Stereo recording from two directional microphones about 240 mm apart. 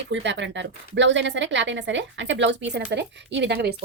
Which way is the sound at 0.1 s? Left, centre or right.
Right.